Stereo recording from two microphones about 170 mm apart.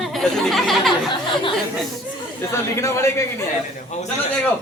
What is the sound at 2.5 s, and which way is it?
Speech, 15° left (ahead or behind).